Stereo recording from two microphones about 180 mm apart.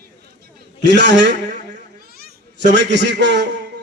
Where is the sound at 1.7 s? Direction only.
55° right (ahead or behind).